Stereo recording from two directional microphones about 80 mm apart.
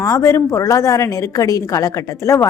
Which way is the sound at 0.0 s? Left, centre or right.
Left.